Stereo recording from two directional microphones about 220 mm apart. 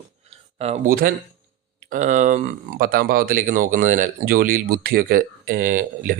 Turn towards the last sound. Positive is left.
turn(degrees=-40)  # may be behind; listen again after turning